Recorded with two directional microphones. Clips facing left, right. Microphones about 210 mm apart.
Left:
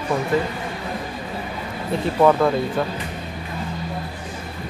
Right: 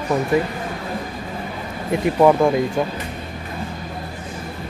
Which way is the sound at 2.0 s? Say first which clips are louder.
Right 2 dB; 10° right (ahead or behind).